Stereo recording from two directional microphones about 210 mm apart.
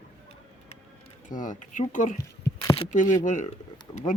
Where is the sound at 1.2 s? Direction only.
40° left (ahead or behind).